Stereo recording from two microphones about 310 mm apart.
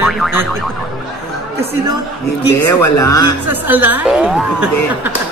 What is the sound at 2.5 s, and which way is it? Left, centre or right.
Speech, left.